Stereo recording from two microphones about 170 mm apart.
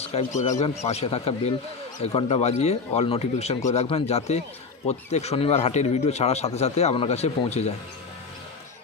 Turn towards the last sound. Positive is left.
turn(degrees=40)  # may be behind; listen again after turning